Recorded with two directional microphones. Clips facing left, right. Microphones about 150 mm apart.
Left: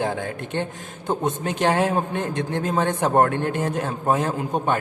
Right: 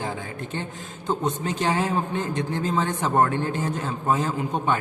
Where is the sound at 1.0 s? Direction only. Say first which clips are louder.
Left 2 dB; 55° left (ahead or behind).